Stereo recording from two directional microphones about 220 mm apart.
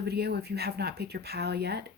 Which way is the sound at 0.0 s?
45° right (ahead or behind).